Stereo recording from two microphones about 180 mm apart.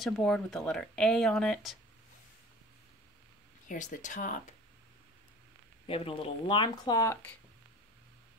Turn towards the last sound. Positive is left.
turn(degrees=20)  # may be behind; listen again after turning